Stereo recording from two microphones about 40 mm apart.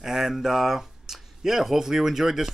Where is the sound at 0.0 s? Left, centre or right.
Centre.